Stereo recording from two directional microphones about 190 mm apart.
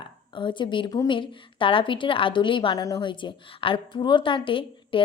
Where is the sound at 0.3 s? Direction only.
25° left (ahead or behind).